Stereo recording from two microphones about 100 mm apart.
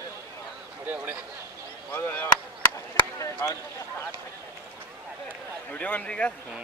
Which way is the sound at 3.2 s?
30° left (ahead or behind).